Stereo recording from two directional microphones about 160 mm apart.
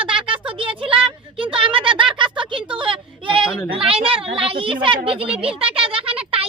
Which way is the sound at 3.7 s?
35° right (ahead or behind).